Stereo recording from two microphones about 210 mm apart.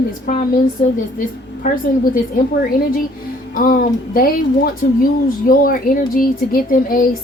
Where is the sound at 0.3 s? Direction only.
40° left (ahead or behind).